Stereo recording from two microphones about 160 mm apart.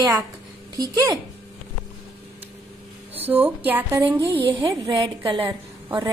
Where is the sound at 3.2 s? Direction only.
10° right (ahead or behind).